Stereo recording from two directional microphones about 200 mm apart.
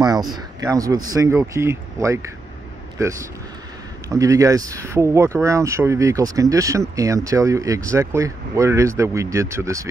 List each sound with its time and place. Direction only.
0.0 s speech: 20° right (ahead or behind)
4.1 s speech: 15° right (ahead or behind)